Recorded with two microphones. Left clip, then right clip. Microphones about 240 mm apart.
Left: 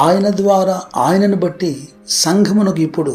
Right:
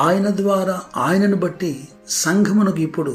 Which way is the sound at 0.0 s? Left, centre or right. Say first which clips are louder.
Left 5 dB; centre.